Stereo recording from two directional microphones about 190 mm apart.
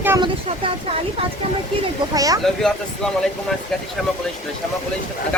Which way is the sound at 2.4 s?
Centre (ahead or behind).